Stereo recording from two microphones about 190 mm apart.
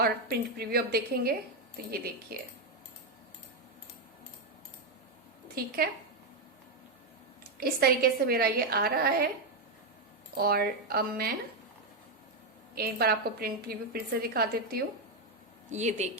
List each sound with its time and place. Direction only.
0.0 s a woman's voice: 55° right (ahead or behind)
2.3 s a woman's voice: 50° right (ahead or behind)
5.5 s a woman's voice: 50° right (ahead or behind)
7.6 s a woman's voice: 55° right (ahead or behind)
10.3 s a woman's voice: 55° right (ahead or behind)
12.7 s a woman's voice: 55° right (ahead or behind)
15.7 s speech: 40° right (ahead or behind)